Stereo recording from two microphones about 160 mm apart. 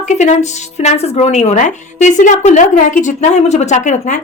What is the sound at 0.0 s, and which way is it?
Speech, 45° left (ahead or behind).